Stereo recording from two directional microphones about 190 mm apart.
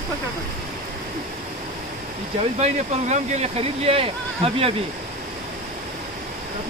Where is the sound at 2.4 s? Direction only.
35° right (ahead or behind).